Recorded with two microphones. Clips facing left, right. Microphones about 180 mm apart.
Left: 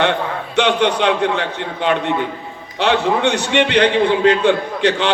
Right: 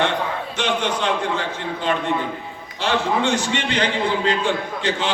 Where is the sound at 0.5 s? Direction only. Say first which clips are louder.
Left 9 dB; 65° left (ahead or behind).